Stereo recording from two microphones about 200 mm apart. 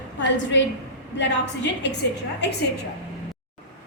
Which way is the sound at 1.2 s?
60° left (ahead or behind).